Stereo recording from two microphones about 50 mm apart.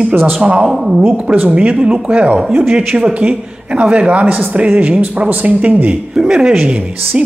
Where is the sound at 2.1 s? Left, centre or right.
Right.